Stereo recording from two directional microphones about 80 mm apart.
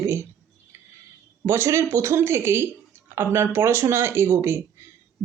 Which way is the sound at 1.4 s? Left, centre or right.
Right.